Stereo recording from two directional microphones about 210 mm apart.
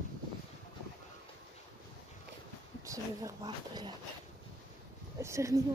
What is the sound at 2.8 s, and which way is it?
Speech, 15° right (ahead or behind).